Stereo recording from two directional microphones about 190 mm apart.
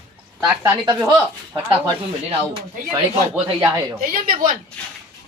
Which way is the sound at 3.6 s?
10° right (ahead or behind).